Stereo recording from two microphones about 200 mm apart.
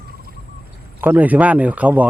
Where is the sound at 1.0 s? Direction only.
10° right (ahead or behind).